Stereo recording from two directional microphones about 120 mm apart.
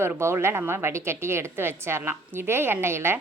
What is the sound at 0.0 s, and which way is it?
A woman's voice, 20° right (ahead or behind).